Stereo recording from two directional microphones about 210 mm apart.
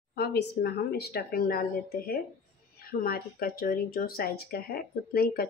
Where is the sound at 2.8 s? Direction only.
45° left (ahead or behind).